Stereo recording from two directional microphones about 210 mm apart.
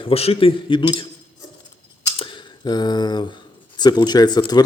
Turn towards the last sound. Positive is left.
turn(degrees=20)  # may be behind; listen again after turning